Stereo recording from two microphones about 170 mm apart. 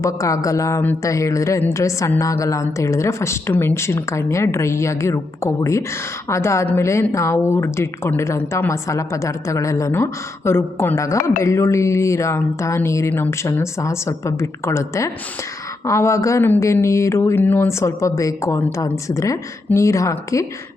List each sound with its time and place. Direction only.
0.0 s speech: 20° left (ahead or behind)